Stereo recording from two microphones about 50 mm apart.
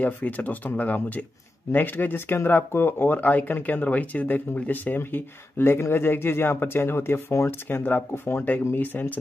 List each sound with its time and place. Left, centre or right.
0.0 s speech: left